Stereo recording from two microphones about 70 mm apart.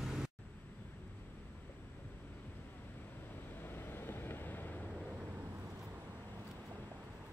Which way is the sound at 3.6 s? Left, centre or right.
Left.